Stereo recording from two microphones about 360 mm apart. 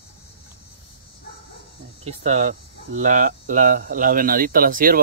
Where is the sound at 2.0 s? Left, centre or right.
Centre.